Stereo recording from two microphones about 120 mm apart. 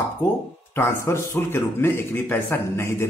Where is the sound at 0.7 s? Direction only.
20° left (ahead or behind).